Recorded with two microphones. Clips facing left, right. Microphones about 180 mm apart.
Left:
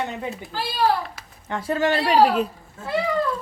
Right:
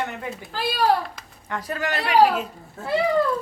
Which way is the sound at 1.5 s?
25° left (ahead or behind).